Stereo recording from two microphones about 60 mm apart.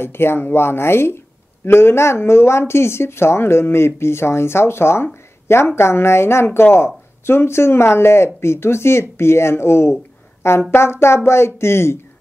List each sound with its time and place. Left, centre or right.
0.0 s speech: left
5.0 s a sound: left
5.8 s speech: left